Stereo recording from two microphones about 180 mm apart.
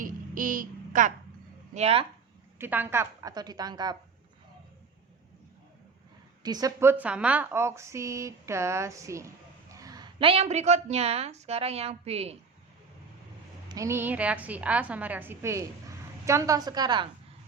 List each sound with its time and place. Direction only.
0.0 s a sound: 50° right (ahead or behind)
1.7 s a woman's voice: 35° right (ahead or behind)
2.6 s a woman's voice: 10° right (ahead or behind)
6.4 s a woman's voice: 20° right (ahead or behind)
13.7 s a woman's voice: 15° right (ahead or behind)